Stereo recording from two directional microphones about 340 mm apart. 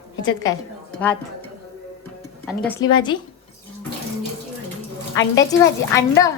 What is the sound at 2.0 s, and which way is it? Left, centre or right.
Music, centre.